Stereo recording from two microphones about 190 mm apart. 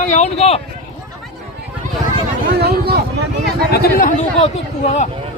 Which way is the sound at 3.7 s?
50° left (ahead or behind).